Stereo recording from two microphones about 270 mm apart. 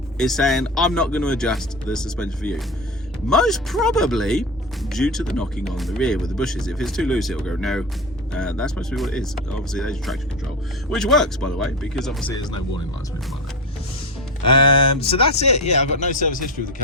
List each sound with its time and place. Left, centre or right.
0.2 s speech: centre
12.3 s speech: centre
14.9 s speech: left